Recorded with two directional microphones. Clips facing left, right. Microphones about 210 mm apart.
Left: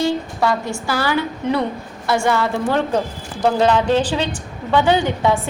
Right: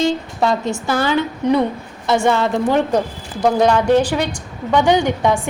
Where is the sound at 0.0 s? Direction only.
20° right (ahead or behind).